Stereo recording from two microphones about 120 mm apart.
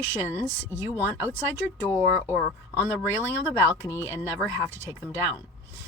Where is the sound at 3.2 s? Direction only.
20° right (ahead or behind).